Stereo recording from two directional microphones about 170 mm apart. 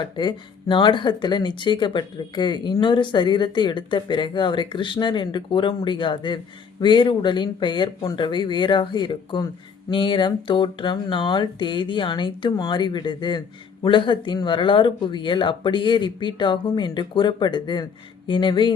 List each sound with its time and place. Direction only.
0.0 s speech: 25° left (ahead or behind)